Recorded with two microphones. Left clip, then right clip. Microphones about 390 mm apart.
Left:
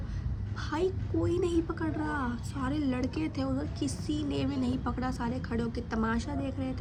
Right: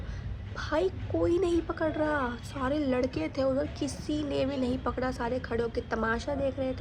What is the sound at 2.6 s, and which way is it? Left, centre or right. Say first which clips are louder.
Speech: right 4 dB; right.